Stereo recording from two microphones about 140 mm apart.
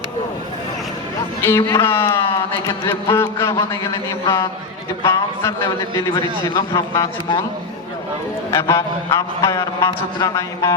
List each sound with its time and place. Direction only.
1.5 s a man's voice: 20° left (ahead or behind)
5.0 s a man's voice: 20° left (ahead or behind)
8.4 s a man's voice: 20° left (ahead or behind)